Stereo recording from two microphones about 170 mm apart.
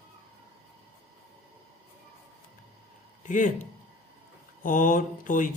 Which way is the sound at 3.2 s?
50° left (ahead or behind).